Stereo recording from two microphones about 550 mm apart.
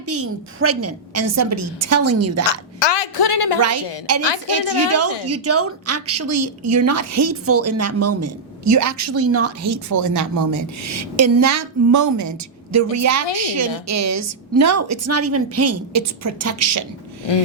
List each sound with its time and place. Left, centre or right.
0.1 s a woman's voice: right
2.7 s a sound: left
4.4 s a woman's voice: right